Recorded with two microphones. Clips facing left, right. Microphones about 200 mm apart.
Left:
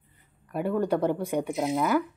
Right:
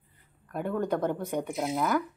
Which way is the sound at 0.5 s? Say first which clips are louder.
Left 3 dB; 10° left (ahead or behind).